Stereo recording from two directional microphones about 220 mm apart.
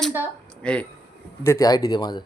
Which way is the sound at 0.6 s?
5° left (ahead or behind).